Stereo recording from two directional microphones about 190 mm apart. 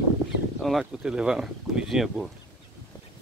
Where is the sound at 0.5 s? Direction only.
Centre (ahead or behind).